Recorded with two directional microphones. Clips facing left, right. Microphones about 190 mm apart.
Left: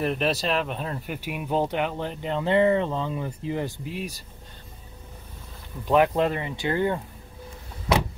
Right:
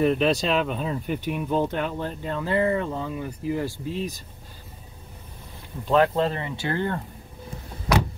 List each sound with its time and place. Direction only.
0.0 s speech: centre (ahead or behind)
5.9 s speech: 15° left (ahead or behind)
7.9 s vehicle: 25° left (ahead or behind)